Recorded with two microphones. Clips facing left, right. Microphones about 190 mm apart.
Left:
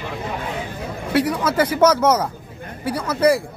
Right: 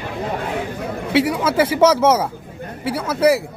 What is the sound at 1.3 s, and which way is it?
Speech, 10° right (ahead or behind).